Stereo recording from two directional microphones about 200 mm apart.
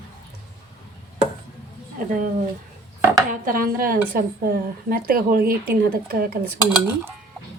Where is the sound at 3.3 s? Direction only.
45° right (ahead or behind).